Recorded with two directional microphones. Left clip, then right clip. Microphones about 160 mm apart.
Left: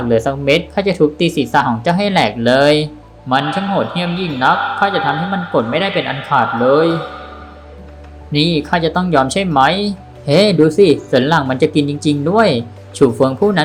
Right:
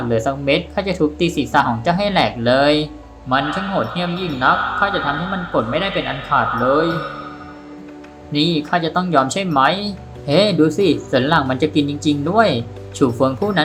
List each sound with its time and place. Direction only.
0.1 s speech: 20° left (ahead or behind)
8.3 s speech: 20° left (ahead or behind)